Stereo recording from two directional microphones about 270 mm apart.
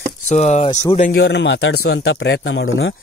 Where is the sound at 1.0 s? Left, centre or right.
Left.